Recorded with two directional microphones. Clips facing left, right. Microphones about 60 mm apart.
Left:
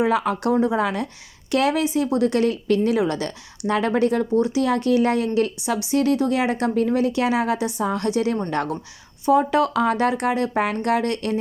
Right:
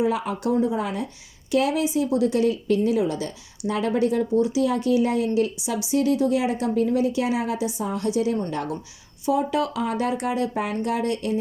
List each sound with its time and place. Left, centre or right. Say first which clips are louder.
0.0 s speech: left 3 dB; left